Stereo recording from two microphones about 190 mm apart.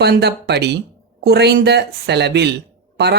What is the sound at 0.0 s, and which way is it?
Speech, 60° right (ahead or behind).